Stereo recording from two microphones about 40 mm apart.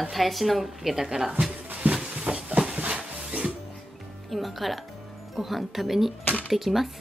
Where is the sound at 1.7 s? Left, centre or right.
Right.